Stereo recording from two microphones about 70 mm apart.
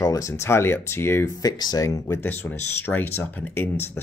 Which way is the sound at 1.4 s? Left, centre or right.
Left.